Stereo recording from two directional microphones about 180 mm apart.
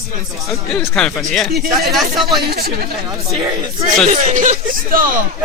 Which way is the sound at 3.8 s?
40° right (ahead or behind).